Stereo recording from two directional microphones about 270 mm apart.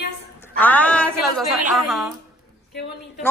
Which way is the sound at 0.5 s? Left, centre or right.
Centre.